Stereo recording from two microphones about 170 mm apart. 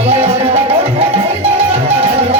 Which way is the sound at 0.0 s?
35° right (ahead or behind).